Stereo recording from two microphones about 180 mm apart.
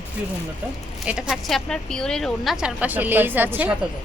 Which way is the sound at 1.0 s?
5° right (ahead or behind).